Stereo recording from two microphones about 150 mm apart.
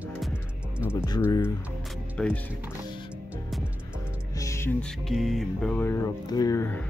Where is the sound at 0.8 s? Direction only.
20° left (ahead or behind).